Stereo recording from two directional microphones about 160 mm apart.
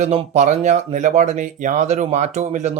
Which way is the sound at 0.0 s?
45° right (ahead or behind).